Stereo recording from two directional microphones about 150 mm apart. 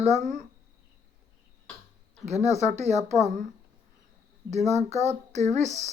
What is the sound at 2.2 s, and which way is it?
Speech, 45° right (ahead or behind).